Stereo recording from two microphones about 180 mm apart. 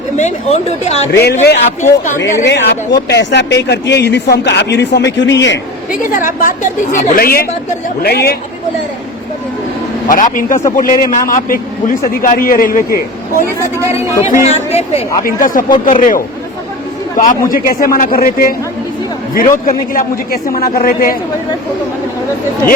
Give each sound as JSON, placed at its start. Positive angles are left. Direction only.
{"t": 0.2, "sound": "speech", "side_deg": 40}
{"t": 1.1, "sound": "speech", "side_deg": 65}
{"t": 2.1, "sound": "speech", "side_deg": 15}
{"t": 2.4, "sound": "speech", "side_deg": 65}
{"t": 6.0, "sound": "a man's voice", "side_deg": 50}
{"t": 10.1, "sound": "a man's voice", "side_deg": 50}
{"t": 14.4, "sound": "speech", "side_deg": 35}
{"t": 15.2, "sound": "a man's voice", "side_deg": 50}